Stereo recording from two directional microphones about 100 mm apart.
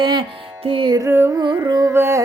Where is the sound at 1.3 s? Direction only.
50° right (ahead or behind).